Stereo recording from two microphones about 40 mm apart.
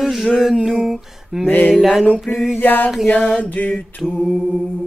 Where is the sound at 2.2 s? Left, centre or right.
Centre.